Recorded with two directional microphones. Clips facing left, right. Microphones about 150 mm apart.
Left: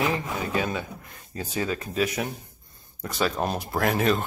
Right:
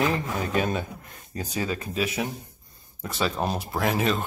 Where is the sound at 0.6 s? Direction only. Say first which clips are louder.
Right 2 dB; 25° right (ahead or behind).